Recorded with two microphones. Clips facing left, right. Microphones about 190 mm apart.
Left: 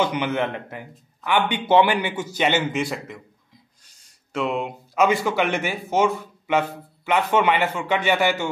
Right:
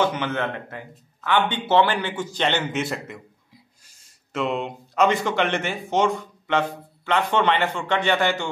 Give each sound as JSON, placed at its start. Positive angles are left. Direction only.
{"t": 0.0, "sound": "a man's voice", "side_deg": 10}